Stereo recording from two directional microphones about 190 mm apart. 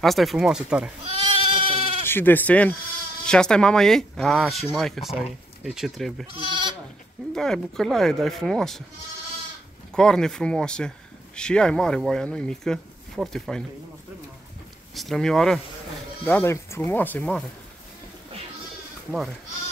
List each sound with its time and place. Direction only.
0.0 s speech: centre (ahead or behind)
1.0 s goat: 25° right (ahead or behind)
2.0 s speech: 10° left (ahead or behind)
6.3 s goat: 25° right (ahead or behind)
7.3 s speech: 5° left (ahead or behind)
9.9 s speech: 5° left (ahead or behind)
15.0 s speech: centre (ahead or behind)